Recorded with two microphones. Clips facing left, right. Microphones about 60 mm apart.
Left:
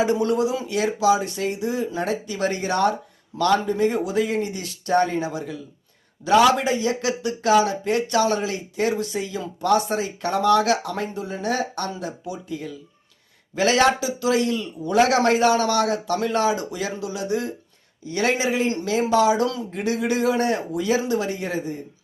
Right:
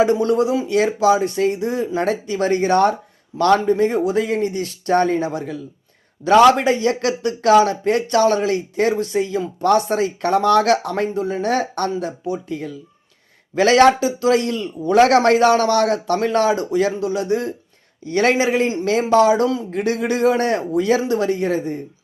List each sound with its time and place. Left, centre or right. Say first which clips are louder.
0.0 s a man's voice: right 4 dB; right
18.0 s a man's voice: right 5 dB; right